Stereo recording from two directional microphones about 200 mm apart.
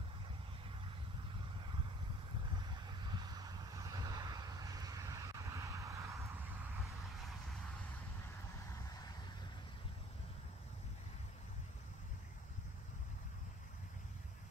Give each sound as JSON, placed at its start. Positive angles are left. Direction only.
{"t": 3.0, "sound": "vehicle", "side_deg": -20}